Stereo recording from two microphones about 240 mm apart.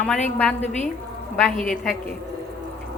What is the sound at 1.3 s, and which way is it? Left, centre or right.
Speech, centre.